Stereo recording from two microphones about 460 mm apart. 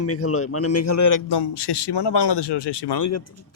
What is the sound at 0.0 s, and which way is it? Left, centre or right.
A man's voice, left.